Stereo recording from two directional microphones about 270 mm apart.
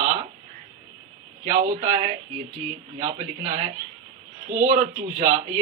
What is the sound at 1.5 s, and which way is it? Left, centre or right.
Speech, right.